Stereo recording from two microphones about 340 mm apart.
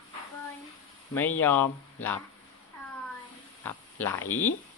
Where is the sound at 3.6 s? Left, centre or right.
Centre.